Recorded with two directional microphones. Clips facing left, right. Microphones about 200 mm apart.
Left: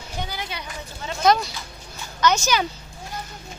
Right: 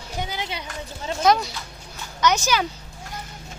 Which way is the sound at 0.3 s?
20° right (ahead or behind).